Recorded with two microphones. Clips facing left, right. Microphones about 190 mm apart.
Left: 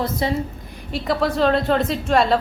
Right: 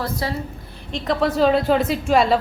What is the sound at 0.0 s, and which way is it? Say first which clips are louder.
Speech: left 3 dB; 20° left (ahead or behind).